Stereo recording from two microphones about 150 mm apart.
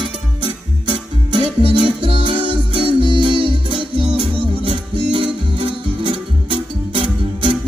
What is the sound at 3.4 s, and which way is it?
Music, 35° right (ahead or behind).